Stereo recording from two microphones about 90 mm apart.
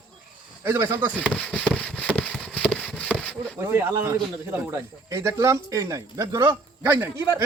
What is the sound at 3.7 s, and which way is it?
A man's voice, 25° right (ahead or behind).